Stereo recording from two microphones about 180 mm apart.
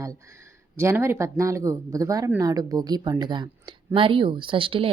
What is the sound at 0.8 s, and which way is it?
Speech, 15° right (ahead or behind).